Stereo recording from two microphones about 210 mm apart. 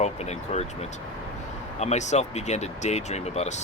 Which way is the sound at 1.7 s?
35° left (ahead or behind).